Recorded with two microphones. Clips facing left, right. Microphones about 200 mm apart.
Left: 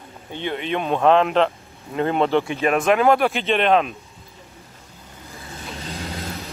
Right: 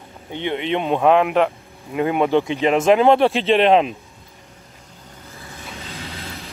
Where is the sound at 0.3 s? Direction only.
20° right (ahead or behind).